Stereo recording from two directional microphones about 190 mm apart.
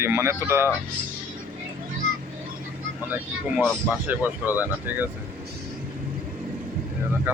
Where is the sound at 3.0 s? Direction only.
10° right (ahead or behind).